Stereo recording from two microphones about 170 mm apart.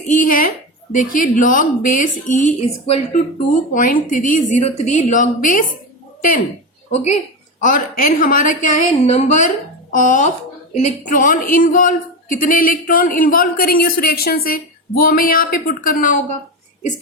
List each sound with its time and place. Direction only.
0.1 s a man's voice: 55° left (ahead or behind)
6.9 s a woman's voice: 40° left (ahead or behind)
7.6 s a woman's voice: 55° left (ahead or behind)